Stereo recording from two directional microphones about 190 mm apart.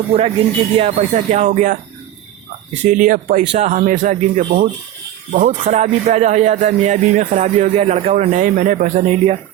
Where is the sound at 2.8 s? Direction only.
45° right (ahead or behind).